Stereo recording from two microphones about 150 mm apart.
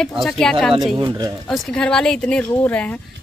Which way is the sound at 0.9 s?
25° right (ahead or behind).